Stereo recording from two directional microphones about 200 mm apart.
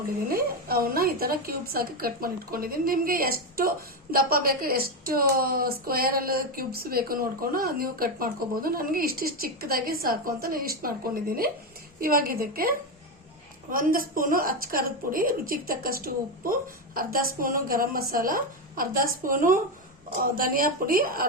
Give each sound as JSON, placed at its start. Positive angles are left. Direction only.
{"t": 0.3, "sound": "a woman's voice", "side_deg": -50}